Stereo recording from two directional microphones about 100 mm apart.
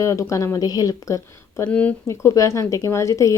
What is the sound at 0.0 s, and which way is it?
A woman's voice, 30° left (ahead or behind).